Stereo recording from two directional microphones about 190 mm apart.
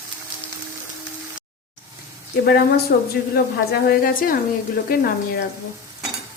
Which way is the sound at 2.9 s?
55° left (ahead or behind).